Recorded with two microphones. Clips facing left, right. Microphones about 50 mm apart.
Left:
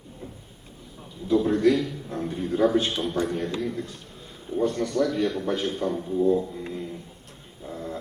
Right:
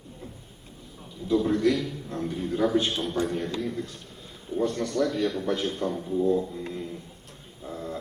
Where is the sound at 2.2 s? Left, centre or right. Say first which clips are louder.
Left 3 dB; centre.